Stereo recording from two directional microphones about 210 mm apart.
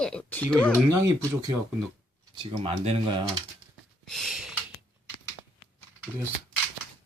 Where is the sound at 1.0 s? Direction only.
15° right (ahead or behind).